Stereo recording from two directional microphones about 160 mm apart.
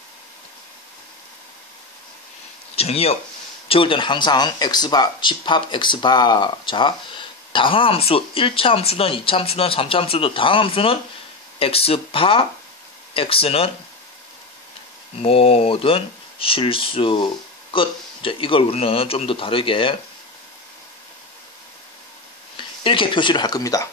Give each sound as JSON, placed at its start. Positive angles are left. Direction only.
{"t": 2.7, "sound": "speech", "side_deg": 40}
{"t": 15.2, "sound": "speech", "side_deg": 35}
{"t": 22.6, "sound": "speech", "side_deg": 30}